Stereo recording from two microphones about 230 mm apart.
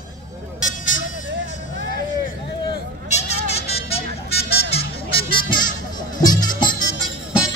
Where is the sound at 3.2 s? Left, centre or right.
Left.